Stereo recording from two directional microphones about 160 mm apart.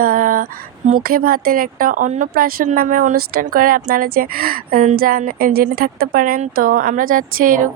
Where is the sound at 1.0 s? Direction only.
65° right (ahead or behind).